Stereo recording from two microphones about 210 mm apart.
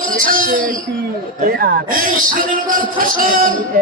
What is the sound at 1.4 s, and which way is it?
A man's voice, 45° right (ahead or behind).